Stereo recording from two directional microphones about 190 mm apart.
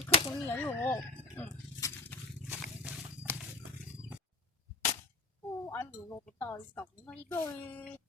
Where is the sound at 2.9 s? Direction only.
5° right (ahead or behind).